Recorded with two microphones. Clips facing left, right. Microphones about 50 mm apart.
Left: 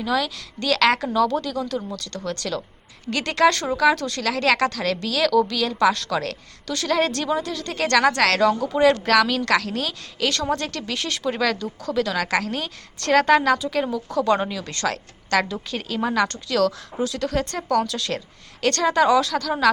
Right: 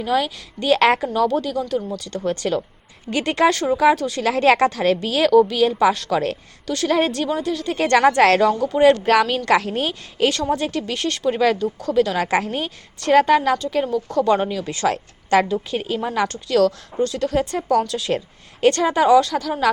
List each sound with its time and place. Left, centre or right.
0.0 s speech: centre
2.0 s a woman's voice: centre
3.5 s speech: centre
4.2 s a woman's voice: right
5.7 s speech: centre
7.8 s a woman's voice: right
8.4 s a woman's voice: centre
10.5 s speech: centre
11.3 s speech: centre
11.8 s speech: centre
12.1 s speech: right
13.0 s speech: centre
14.8 s a woman's voice: right
16.1 s speech: centre